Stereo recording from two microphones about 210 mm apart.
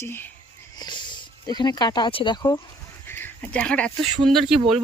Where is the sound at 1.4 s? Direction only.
20° left (ahead or behind).